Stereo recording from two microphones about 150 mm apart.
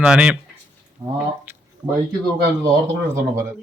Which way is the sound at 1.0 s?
25° right (ahead or behind).